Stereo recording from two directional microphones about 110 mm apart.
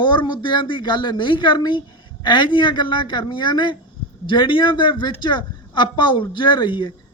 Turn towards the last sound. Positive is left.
turn(degrees=45)  # may be behind; listen again after turning